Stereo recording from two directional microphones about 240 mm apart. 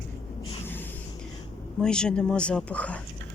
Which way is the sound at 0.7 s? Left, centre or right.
Centre.